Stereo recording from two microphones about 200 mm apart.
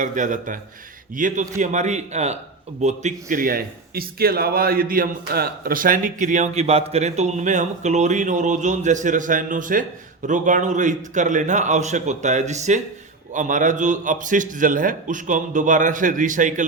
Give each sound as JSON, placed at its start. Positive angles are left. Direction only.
{"t": 0.0, "sound": "a man's voice", "side_deg": -40}